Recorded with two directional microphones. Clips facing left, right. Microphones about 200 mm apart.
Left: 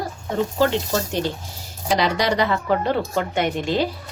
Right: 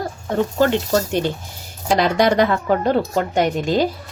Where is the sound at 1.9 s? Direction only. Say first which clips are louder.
Right 5 dB; 50° right (ahead or behind).